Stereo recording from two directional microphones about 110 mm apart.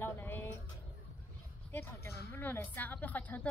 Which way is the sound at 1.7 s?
20° left (ahead or behind).